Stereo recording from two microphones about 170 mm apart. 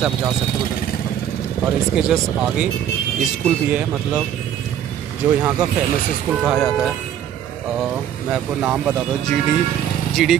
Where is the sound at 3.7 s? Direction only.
5° right (ahead or behind).